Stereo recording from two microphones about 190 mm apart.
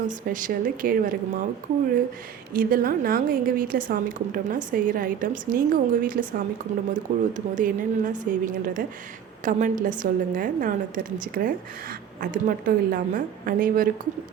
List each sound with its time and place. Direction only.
0.1 s a woman's voice: 45° right (ahead or behind)
2.5 s a woman's voice: 50° right (ahead or behind)